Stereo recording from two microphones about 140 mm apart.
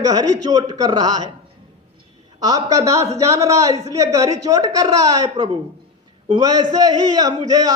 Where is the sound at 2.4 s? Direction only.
25° right (ahead or behind).